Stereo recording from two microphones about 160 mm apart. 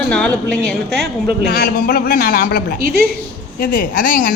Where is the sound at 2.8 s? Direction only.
75° right (ahead or behind).